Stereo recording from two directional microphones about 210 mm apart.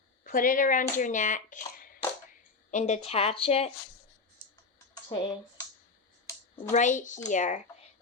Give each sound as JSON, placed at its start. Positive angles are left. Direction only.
{"t": 0.3, "sound": "a woman's voice", "side_deg": 40}
{"t": 5.0, "sound": "speech", "side_deg": 20}
{"t": 6.7, "sound": "speech", "side_deg": 35}